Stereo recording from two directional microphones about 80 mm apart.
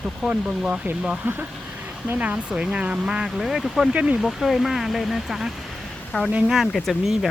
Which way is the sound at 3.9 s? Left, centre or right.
Centre.